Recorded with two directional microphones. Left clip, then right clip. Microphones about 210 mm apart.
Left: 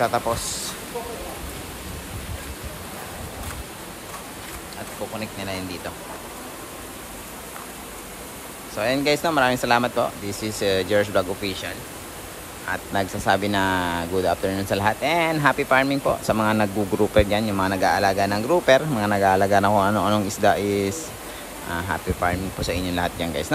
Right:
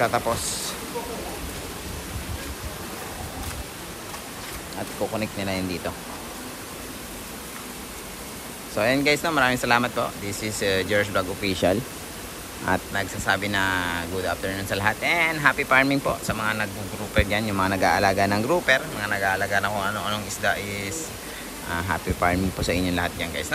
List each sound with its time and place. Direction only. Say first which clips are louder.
0.0 s speech: left 1 dB; 20° left (ahead or behind)
5.2 s speech: right 2 dB; 15° left (ahead or behind)
8.7 s speech: even; 15° left (ahead or behind)
12.7 s speech: right 4 dB; 5° left (ahead or behind)
13.3 s speech: left 2 dB; 20° left (ahead or behind)
21.7 s speech: even; 10° left (ahead or behind)